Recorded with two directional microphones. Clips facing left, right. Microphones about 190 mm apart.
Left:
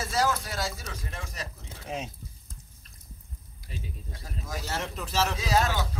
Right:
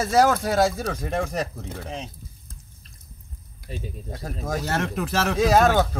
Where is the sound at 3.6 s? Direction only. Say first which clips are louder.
Right 7 dB; 70° right (ahead or behind).